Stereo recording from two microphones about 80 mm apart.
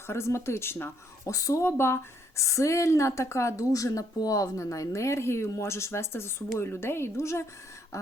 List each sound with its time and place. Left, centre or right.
0.1 s speech: left